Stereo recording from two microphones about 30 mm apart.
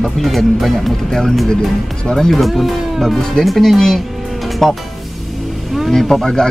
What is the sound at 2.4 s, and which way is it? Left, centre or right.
Speech, centre.